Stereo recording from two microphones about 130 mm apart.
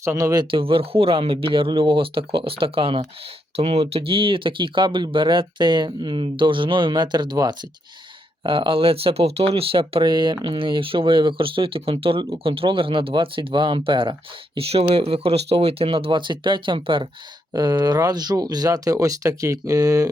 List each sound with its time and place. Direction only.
0.0 s speech: 25° right (ahead or behind)
0.5 s speech: 45° right (ahead or behind); by 20.1 s 25° right (ahead or behind)